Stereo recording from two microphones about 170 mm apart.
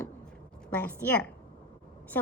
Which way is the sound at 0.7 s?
10° left (ahead or behind).